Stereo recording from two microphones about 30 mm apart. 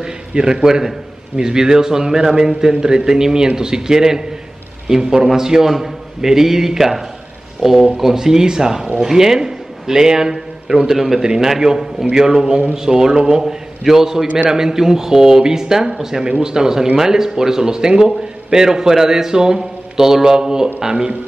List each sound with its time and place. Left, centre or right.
0.4 s a man's voice: right
5.7 s a man's voice: centre
11.1 s a man's voice: right
11.4 s a man's voice: centre
13.4 s a man's voice: centre
14.2 s a man's voice: right
14.5 s a man's voice: centre